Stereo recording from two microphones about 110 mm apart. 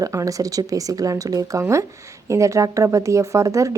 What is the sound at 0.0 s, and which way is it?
Speech, 30° right (ahead or behind).